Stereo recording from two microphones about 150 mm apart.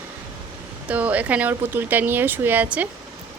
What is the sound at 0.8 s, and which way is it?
A woman's voice, 10° right (ahead or behind).